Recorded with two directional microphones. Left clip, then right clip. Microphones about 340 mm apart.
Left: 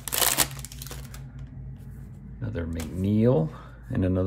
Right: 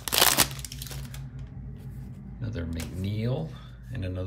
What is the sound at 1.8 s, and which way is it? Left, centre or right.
Speech, centre.